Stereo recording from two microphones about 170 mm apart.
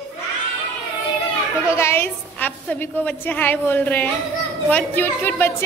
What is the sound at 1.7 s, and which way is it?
A woman's voice, 15° left (ahead or behind).